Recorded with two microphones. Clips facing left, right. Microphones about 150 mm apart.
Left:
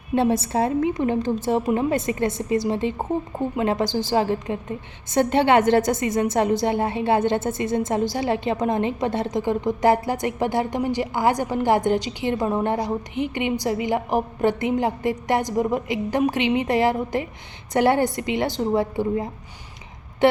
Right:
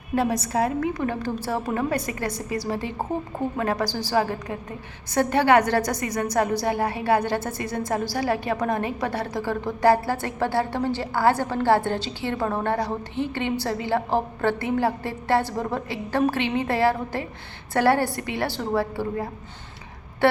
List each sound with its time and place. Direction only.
0.1 s a woman's voice: 25° left (ahead or behind)